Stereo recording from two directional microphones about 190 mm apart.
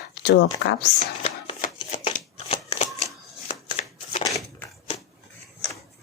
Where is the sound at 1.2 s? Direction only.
35° left (ahead or behind).